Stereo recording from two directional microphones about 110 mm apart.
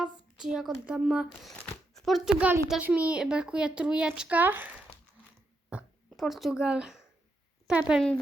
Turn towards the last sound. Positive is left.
turn(degrees=-10)  # may be behind; listen again after turning